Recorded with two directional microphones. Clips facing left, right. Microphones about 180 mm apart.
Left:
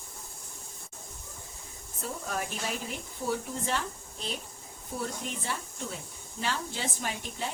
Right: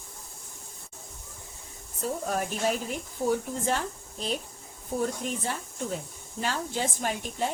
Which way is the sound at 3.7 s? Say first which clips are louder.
Right 5 dB; 40° right (ahead or behind).